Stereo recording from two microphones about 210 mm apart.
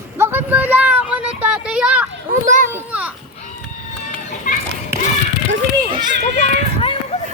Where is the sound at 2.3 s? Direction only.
40° right (ahead or behind).